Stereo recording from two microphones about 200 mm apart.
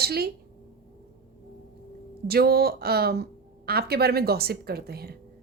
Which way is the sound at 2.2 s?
50° right (ahead or behind).